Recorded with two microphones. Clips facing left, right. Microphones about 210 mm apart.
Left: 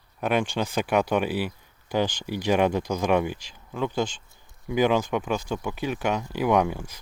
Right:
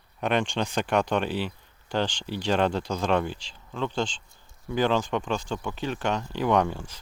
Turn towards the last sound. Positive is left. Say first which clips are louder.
# left 1 dB
turn(degrees=10)  # may be behind; listen again after turning